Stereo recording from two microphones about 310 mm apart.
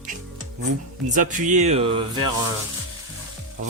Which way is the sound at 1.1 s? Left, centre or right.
Right.